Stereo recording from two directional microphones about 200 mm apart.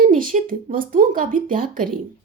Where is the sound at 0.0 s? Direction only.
40° right (ahead or behind).